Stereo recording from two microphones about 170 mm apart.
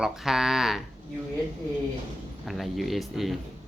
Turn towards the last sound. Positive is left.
turn(degrees=0)  # may be behind; listen again after turning